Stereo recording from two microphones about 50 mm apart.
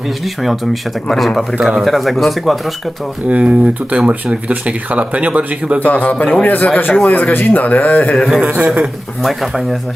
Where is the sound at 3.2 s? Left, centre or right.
Right.